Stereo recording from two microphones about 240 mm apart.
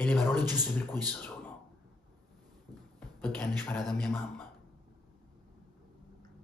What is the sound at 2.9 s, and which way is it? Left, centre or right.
Speech, centre.